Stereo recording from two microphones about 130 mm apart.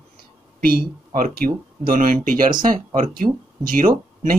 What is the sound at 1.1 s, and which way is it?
Speech, 90° right.